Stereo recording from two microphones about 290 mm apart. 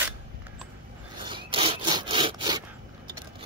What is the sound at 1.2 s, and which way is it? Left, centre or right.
Sawing, centre.